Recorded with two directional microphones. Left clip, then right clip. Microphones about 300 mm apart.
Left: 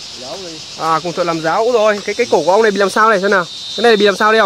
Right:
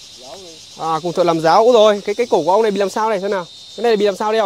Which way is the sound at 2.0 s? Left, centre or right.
Right.